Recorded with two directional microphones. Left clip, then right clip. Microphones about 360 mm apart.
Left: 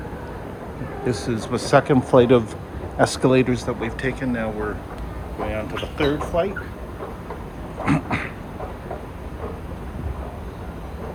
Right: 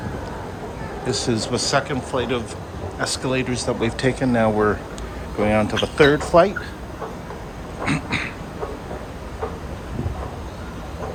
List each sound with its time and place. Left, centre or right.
1.0 s speech: centre
7.9 s dog: centre